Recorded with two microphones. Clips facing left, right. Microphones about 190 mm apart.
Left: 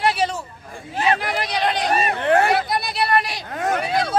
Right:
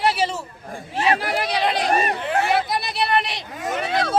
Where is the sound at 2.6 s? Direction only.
Centre (ahead or behind).